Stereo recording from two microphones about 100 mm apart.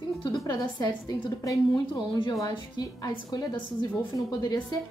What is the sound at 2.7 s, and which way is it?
A woman's voice, 40° left (ahead or behind).